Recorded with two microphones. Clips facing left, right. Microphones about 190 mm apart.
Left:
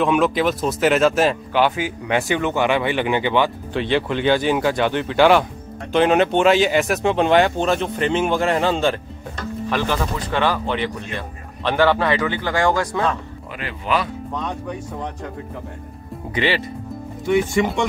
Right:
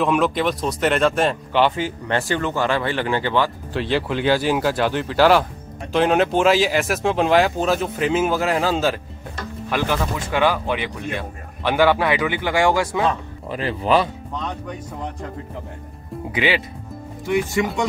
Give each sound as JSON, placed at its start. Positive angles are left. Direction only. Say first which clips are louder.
{"t": 0.0, "sound": "speech", "louder": "left 1 dB", "side_deg": 0}
{"t": 3.7, "sound": "speech", "louder": "left 1 dB", "side_deg": -5}
{"t": 13.5, "sound": "speech", "louder": "right 4 dB", "side_deg": -35}
{"t": 16.3, "sound": "speech", "louder": "even", "side_deg": -5}